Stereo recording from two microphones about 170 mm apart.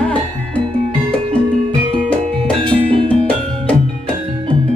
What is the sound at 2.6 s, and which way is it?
Music, 35° right (ahead or behind).